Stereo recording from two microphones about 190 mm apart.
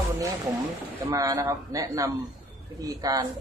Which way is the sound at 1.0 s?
20° right (ahead or behind).